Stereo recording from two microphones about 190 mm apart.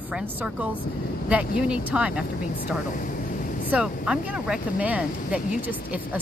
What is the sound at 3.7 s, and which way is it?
Speech, 5° right (ahead or behind).